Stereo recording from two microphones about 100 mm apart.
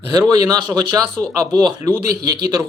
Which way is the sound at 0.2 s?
40° right (ahead or behind).